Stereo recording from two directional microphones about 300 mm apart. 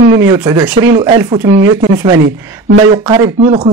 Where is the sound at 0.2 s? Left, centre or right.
Centre.